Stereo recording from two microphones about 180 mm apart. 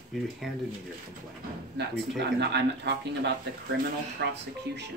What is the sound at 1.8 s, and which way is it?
Speech, 70° right (ahead or behind).